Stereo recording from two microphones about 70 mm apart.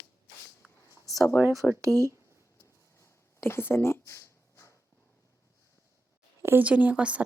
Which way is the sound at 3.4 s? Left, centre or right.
Left.